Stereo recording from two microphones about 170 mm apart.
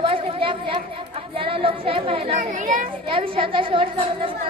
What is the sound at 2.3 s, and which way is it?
Speech, 50° right (ahead or behind).